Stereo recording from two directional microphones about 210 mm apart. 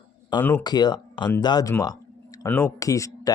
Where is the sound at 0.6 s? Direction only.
20° left (ahead or behind).